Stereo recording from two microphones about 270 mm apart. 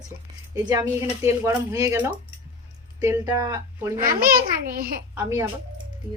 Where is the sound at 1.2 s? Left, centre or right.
Centre.